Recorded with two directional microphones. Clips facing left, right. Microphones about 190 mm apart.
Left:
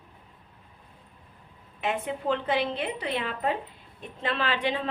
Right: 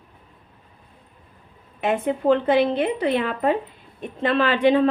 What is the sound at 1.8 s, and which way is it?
A woman's voice, 50° right (ahead or behind).